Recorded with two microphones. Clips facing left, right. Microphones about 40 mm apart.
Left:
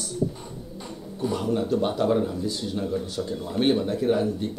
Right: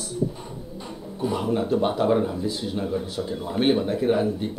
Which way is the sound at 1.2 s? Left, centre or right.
Centre.